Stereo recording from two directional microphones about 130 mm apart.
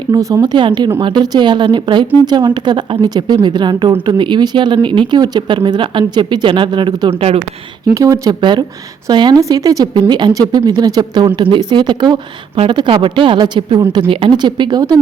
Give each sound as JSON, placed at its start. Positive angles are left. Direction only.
{"t": 0.1, "sound": "speech", "side_deg": -25}
{"t": 7.9, "sound": "speech", "side_deg": -25}
{"t": 8.4, "sound": "speech", "side_deg": -40}